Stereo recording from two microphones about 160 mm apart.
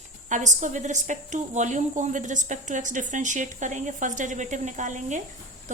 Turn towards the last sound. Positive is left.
turn(degrees=-50)  # may be behind; listen again after turning